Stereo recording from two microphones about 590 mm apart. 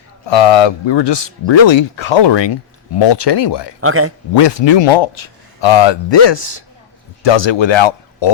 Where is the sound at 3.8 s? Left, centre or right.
Right.